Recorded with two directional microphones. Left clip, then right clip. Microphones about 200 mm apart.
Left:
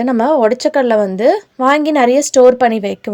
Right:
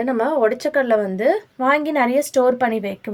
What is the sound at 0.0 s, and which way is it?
Speech, 40° left (ahead or behind).